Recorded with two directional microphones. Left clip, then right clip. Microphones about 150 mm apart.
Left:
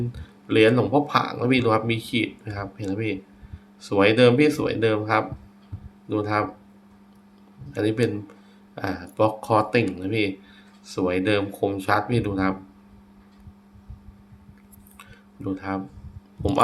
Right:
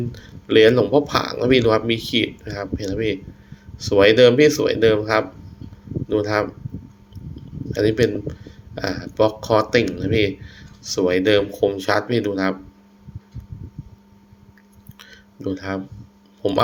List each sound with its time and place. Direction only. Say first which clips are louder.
0.1 s speech: right 8 dB; 20° right (ahead or behind)
7.7 s speech: right 5 dB; 20° right (ahead or behind)
14.9 s a sound: right 4 dB; 15° right (ahead or behind)
16.4 s speech: right 1 dB; 10° right (ahead or behind)